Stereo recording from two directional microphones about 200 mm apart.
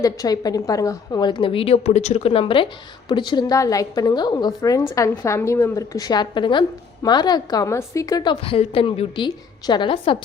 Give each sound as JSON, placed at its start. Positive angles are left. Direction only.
{"t": 0.0, "sound": "a woman's voice", "side_deg": 20}